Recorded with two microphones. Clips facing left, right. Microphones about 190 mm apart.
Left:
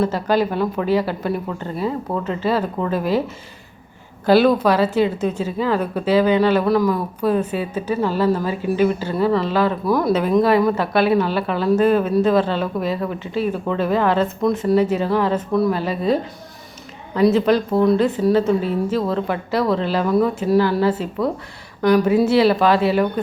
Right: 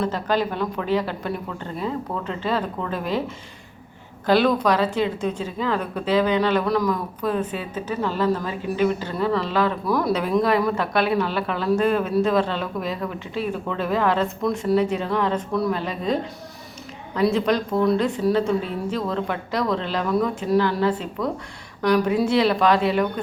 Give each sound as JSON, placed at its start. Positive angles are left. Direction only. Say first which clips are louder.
{"t": 0.0, "sound": "a woman's voice", "louder": "left 4 dB", "side_deg": 10}
{"t": 4.3, "sound": "a woman's voice", "louder": "left 4 dB", "side_deg": 5}
{"t": 17.2, "sound": "a woman's voice", "louder": "left 5 dB", "side_deg": 0}